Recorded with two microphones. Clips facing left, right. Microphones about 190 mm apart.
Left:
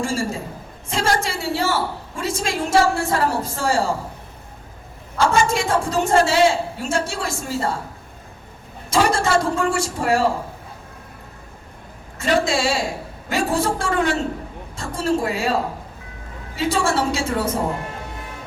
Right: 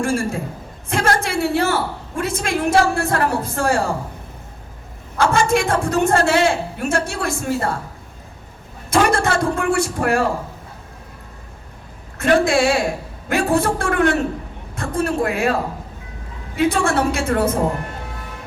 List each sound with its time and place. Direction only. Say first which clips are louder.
0.0 s a sound: right 3 dB; 55° right (ahead or behind)
0.9 s a woman's voice: right 2 dB; 55° right (ahead or behind)
5.1 s a woman's voice: right 2 dB; 55° right (ahead or behind)
8.9 s a woman's voice: right 1 dB; 55° right (ahead or behind)
12.1 s a woman's voice: right 4 dB; 55° right (ahead or behind)
16.6 s a woman's voice: right 3 dB; 55° right (ahead or behind)